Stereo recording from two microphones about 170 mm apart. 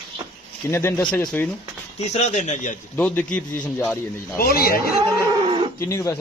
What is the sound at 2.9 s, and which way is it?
Speech, 5° left (ahead or behind).